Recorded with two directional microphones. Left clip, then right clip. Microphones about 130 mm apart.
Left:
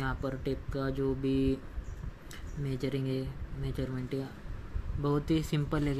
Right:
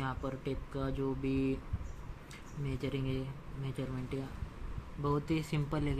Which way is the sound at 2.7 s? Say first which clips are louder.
Left 4 dB; 30° left (ahead or behind).